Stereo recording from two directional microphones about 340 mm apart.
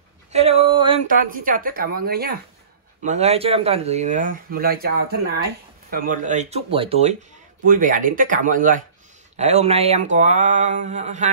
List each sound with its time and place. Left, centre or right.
0.3 s speech: centre